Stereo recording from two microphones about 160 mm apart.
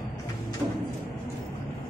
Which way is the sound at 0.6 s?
15° right (ahead or behind).